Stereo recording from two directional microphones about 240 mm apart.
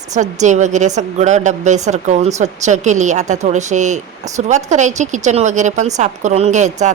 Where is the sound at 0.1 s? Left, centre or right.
Right.